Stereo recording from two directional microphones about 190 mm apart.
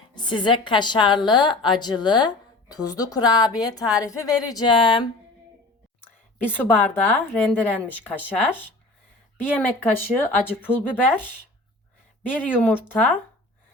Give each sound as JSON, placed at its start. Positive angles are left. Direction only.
{"t": 0.1, "sound": "a woman's voice", "side_deg": 25}
{"t": 6.0, "sound": "a woman's voice", "side_deg": 10}
{"t": 9.4, "sound": "speech", "side_deg": 10}
{"t": 12.2, "sound": "speech", "side_deg": 10}